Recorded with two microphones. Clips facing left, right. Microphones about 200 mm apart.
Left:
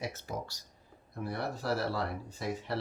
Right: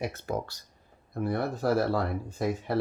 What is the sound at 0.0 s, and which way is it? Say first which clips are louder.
Speech: right 6 dB; 55° right (ahead or behind).